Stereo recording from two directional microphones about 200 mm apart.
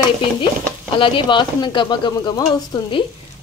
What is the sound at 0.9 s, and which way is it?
A woman's voice, 25° left (ahead or behind).